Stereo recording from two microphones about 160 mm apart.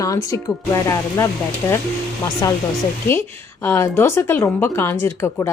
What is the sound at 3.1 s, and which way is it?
Speech, 15° left (ahead or behind).